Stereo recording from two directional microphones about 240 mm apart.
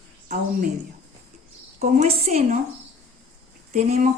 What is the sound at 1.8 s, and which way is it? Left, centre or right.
Speech, right.